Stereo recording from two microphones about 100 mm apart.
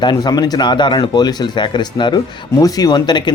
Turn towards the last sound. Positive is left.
turn(degrees=45)  # may be behind; listen again after turning